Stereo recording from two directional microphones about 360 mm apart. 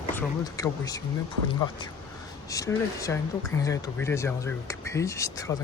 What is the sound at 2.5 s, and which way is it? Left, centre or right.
Speech, centre.